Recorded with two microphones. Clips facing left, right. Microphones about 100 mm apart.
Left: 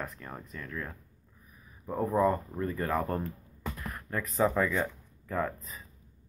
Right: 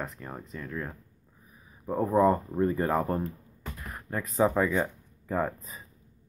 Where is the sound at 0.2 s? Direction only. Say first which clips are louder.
Right 3 dB; 15° right (ahead or behind).